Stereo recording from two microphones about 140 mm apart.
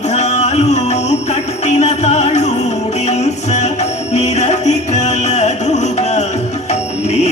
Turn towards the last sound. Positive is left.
turn(degrees=55)  # may be behind; listen again after turning